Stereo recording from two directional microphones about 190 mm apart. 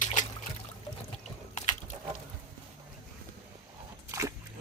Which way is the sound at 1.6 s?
40° left (ahead or behind).